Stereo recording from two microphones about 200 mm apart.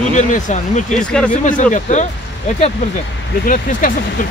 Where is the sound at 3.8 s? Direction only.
45° left (ahead or behind).